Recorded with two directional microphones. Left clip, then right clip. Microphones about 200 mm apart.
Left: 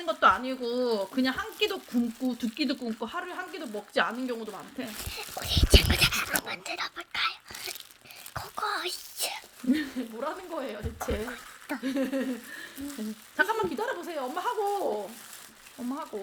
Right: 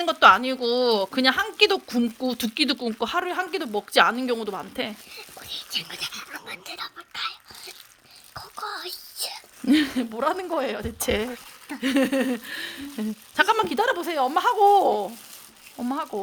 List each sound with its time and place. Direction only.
0.0 s a woman's voice: 60° right (ahead or behind)
5.1 s speech: 40° left (ahead or behind)
6.3 s speech: 15° left (ahead or behind)
8.3 s a sound: 25° left (ahead or behind)
9.6 s speech: 50° right (ahead or behind)